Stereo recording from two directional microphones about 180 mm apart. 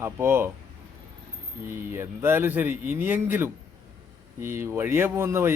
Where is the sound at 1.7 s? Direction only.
15° right (ahead or behind).